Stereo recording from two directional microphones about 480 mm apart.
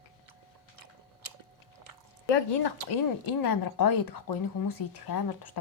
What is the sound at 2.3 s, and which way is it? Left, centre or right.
Speech, left.